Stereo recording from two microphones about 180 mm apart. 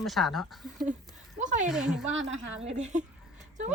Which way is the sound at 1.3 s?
45° right (ahead or behind).